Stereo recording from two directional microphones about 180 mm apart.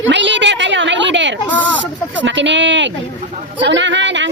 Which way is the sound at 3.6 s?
90° right.